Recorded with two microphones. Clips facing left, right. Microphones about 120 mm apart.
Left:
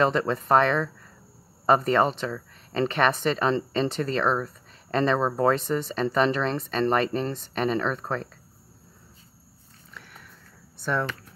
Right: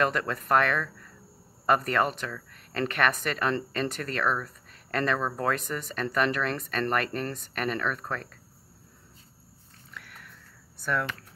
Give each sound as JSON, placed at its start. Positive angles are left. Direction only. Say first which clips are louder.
{"t": 0.0, "sound": "speech", "louder": "left 4 dB", "side_deg": 25}
{"t": 10.8, "sound": "speech", "louder": "left 2 dB", "side_deg": 25}